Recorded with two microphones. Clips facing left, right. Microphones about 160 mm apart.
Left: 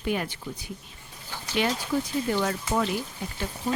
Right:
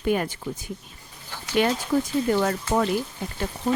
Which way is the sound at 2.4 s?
50° right (ahead or behind).